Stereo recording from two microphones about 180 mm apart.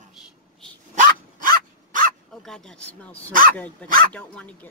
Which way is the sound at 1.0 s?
50° right (ahead or behind).